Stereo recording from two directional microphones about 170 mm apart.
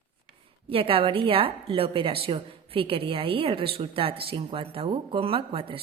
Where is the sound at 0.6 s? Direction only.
35° right (ahead or behind).